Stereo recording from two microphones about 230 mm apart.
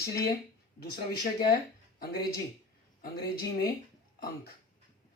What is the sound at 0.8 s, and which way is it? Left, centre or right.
Speech, left.